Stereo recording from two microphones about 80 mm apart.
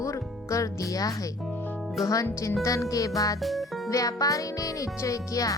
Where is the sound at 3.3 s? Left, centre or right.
Centre.